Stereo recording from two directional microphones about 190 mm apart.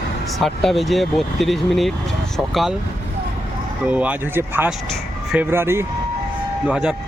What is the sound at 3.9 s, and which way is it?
Speech, 10° right (ahead or behind).